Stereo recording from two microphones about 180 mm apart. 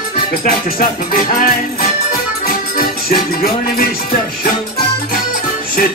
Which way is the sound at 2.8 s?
55° left (ahead or behind).